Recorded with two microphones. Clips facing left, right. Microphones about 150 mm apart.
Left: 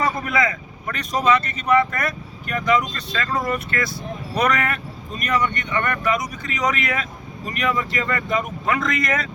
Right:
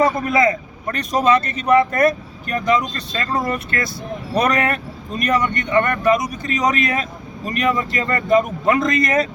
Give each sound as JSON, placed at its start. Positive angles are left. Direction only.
{"t": 0.0, "sound": "speech", "side_deg": -35}